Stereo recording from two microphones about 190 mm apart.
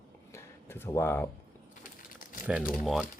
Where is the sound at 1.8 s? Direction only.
45° left (ahead or behind).